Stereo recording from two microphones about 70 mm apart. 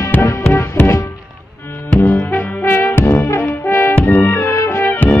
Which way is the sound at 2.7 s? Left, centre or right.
Left.